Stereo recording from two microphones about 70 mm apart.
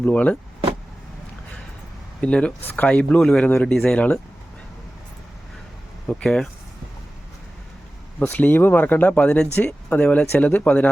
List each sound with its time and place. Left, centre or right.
0.0 s speech: left
2.2 s a man's voice: centre
6.1 s a man's voice: centre
8.2 s speech: left